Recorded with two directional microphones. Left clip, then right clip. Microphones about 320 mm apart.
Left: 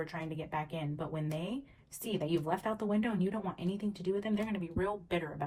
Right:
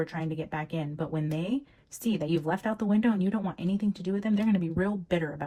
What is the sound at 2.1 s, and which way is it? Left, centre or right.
Speech, right.